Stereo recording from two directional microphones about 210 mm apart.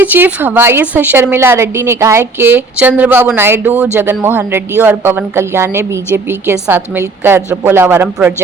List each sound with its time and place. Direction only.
0.0 s a woman's voice: 10° right (ahead or behind)